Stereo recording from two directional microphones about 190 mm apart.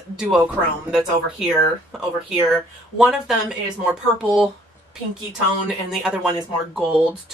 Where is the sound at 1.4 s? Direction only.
5° right (ahead or behind).